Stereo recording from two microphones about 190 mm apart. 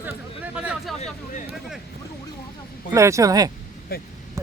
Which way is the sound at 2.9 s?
15° right (ahead or behind).